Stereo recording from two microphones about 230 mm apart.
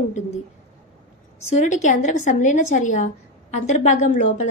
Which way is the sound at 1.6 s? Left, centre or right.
Left.